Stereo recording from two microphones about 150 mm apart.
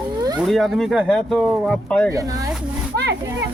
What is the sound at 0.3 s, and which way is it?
Speech, centre (ahead or behind).